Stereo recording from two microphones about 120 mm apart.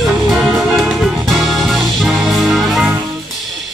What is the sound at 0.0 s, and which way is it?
Music, centre (ahead or behind).